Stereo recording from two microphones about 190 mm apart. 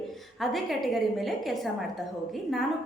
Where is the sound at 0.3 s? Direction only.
Centre (ahead or behind).